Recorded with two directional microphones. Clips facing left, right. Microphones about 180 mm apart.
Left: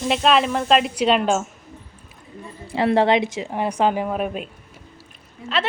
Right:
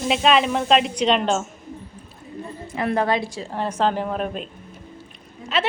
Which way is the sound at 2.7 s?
30° left (ahead or behind).